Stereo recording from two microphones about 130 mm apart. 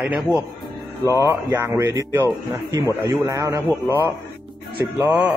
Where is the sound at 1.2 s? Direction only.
20° right (ahead or behind).